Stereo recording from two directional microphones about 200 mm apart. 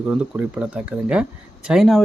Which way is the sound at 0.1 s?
5° right (ahead or behind).